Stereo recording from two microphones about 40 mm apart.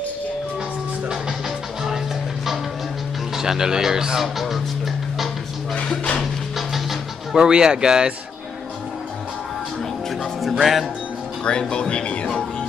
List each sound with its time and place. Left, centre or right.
3.3 s speech: centre
4.2 s music: centre
6.5 s music: centre
7.3 s speech: centre
10.6 s speech: centre
11.4 s speech: left